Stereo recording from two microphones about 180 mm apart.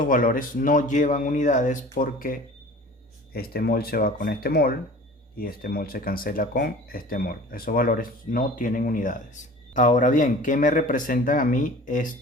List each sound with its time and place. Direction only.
0.0 s speech: 50° left (ahead or behind)